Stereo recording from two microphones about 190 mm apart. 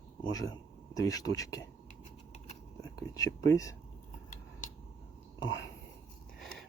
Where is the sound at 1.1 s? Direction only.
20° left (ahead or behind).